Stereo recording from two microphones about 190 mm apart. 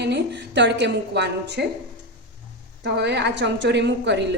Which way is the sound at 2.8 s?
60° right (ahead or behind).